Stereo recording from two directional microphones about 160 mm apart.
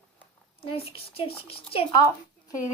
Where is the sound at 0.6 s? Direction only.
35° left (ahead or behind).